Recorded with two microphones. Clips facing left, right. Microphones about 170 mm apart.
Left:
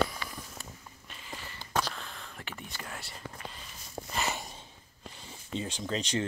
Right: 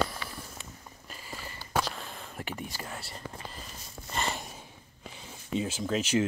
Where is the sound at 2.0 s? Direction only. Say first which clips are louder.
Right 5 dB; 15° right (ahead or behind).